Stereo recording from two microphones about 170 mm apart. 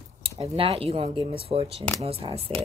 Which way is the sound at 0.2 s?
35° right (ahead or behind).